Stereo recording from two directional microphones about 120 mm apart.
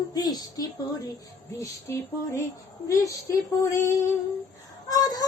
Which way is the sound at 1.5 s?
25° left (ahead or behind).